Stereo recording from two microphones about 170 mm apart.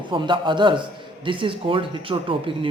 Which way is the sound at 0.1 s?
25° right (ahead or behind).